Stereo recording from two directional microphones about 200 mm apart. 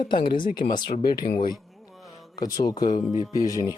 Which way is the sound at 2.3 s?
20° left (ahead or behind).